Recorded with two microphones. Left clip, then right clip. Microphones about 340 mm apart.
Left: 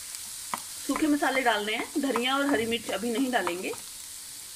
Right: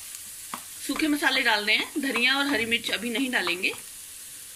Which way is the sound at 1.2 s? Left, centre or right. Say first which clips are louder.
Right 2 dB; centre.